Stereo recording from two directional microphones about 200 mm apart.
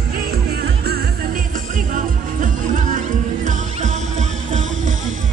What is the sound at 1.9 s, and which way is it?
Music, 40° right (ahead or behind).